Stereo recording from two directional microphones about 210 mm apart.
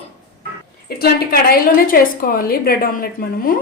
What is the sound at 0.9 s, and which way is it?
A woman's voice, 45° left (ahead or behind).